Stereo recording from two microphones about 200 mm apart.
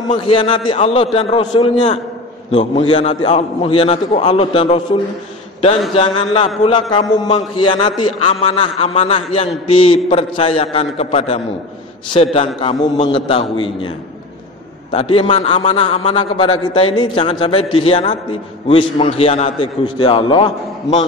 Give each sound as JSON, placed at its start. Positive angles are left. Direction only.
{"t": 0.2, "sound": "a man's voice", "side_deg": 25}